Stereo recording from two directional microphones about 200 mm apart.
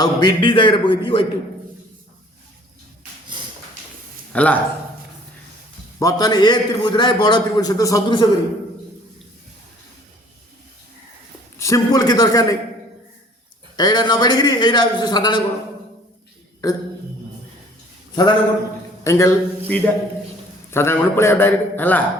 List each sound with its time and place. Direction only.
0.0 s a man's voice: 20° left (ahead or behind)
4.3 s speech: 5° left (ahead or behind)
6.0 s a man's voice: 15° left (ahead or behind)
11.5 s a man's voice: 15° left (ahead or behind)
13.7 s a man's voice: 20° left (ahead or behind)
18.1 s a man's voice: 20° left (ahead or behind)